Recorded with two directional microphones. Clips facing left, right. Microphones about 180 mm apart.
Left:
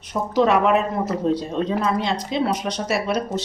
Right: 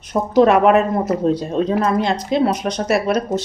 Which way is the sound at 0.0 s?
50° right (ahead or behind).